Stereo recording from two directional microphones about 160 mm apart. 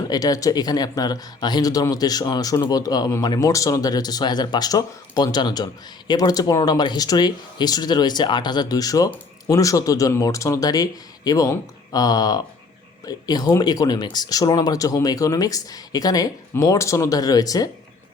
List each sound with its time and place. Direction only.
0.1 s speech: 25° left (ahead or behind)